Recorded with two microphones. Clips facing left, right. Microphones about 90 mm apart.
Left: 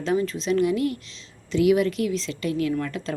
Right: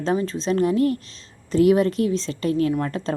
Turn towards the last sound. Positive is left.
turn(degrees=-35)  # may be behind; listen again after turning